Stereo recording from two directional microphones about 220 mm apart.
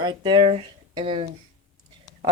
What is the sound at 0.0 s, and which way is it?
Speech, 20° right (ahead or behind).